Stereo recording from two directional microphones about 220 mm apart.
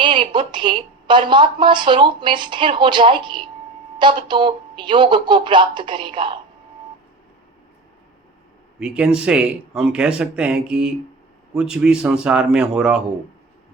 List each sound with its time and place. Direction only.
0.0 s a woman's voice: 20° right (ahead or behind)
8.8 s speech: 5° right (ahead or behind)